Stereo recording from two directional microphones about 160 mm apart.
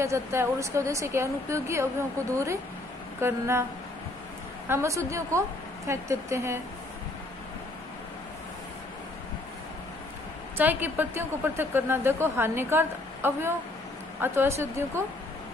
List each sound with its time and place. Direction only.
0.0 s a woman's voice: 15° right (ahead or behind)
4.6 s a woman's voice: 20° right (ahead or behind)
10.6 s a woman's voice: 10° right (ahead or behind)